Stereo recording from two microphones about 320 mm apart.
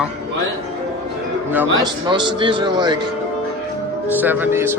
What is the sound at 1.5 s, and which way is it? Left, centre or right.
A man's voice, centre.